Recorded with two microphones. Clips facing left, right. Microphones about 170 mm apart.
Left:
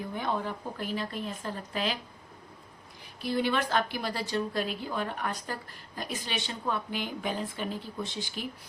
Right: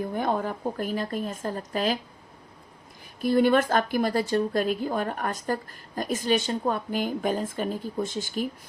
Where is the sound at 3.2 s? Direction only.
50° right (ahead or behind).